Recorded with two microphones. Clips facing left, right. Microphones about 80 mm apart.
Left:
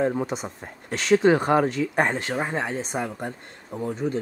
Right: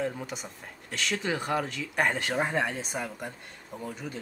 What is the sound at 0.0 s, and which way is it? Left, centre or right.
Speech, left.